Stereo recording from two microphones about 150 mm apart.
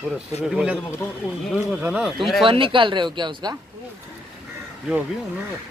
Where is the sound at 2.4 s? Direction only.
35° right (ahead or behind).